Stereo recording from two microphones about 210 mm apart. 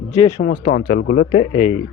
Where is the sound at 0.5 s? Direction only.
50° left (ahead or behind); by 1.7 s 30° left (ahead or behind).